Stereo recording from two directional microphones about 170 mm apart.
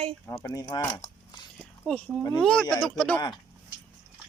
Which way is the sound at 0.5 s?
20° left (ahead or behind).